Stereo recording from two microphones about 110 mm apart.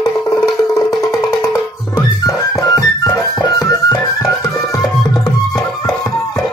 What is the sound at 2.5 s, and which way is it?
Music, 35° left (ahead or behind).